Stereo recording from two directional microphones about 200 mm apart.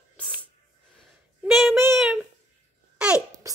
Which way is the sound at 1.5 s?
Centre (ahead or behind).